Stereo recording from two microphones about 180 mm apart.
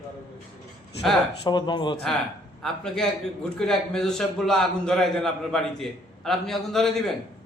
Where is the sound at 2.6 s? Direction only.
5° left (ahead or behind).